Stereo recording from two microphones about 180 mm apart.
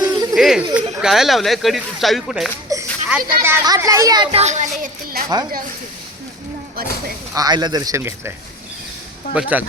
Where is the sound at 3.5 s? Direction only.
20° right (ahead or behind).